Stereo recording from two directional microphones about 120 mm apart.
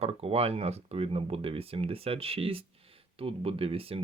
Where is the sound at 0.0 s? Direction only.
55° right (ahead or behind).